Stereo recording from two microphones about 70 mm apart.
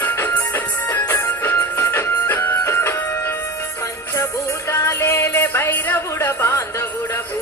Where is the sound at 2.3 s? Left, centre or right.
Left.